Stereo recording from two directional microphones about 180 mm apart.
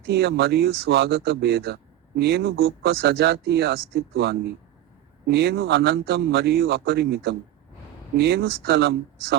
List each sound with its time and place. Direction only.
0.1 s speech: 60° right (ahead or behind)